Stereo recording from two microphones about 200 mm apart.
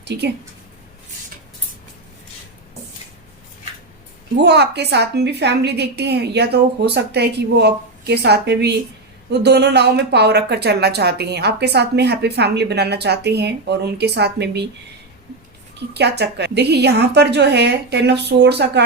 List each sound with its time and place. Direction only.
0.0 s speech: 55° right (ahead or behind)
4.4 s a woman's voice: 55° right (ahead or behind)
16.0 s a woman's voice: 55° right (ahead or behind)